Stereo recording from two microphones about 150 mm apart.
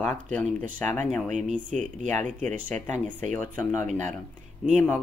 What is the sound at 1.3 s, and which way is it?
Speech, 55° right (ahead or behind).